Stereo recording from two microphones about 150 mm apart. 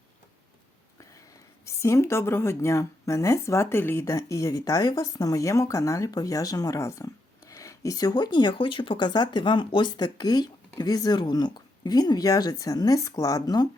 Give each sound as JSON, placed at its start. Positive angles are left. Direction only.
{"t": 1.6, "sound": "speech", "side_deg": 20}